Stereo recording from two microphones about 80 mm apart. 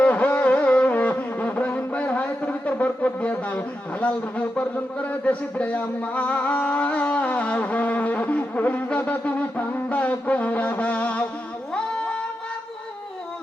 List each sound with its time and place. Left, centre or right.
0.0 s music: centre
4.0 s a man's voice: centre
4.6 s music: centre